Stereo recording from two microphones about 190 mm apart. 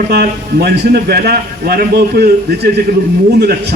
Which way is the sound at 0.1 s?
55° right (ahead or behind).